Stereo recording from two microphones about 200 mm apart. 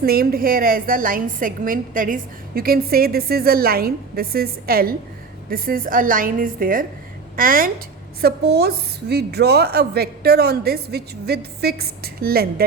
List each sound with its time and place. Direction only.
0.0 s a woman's voice: 50° right (ahead or behind)